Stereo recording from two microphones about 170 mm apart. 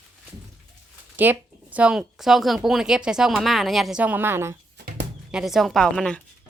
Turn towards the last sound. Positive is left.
turn(degrees=5)  # may be behind; listen again after turning